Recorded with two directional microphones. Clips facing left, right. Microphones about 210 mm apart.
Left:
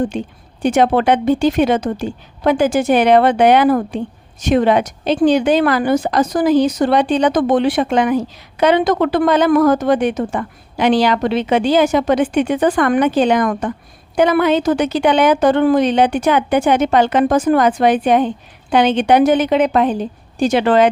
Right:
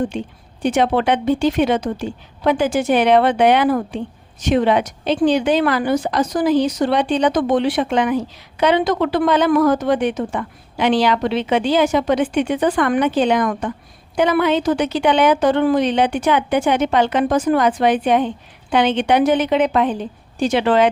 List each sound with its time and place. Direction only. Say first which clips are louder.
0.6 s a woman's voice: left 3 dB; 45° left (ahead or behind)